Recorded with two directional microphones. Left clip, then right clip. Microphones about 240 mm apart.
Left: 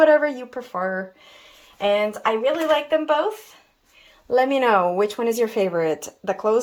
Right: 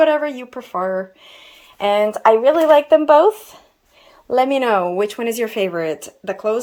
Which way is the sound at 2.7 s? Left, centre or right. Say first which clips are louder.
Right 10 dB; right.